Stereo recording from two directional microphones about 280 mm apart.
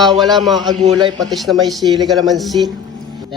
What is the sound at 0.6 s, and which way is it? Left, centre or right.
Speech, centre.